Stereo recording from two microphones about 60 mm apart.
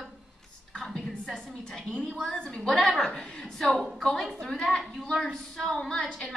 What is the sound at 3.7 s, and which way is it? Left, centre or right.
A woman's voice, centre.